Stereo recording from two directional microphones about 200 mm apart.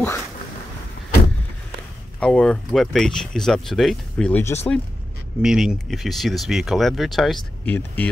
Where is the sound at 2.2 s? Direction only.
5° left (ahead or behind).